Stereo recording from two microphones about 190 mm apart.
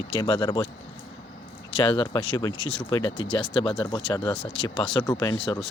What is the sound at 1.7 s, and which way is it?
Speech, 25° left (ahead or behind).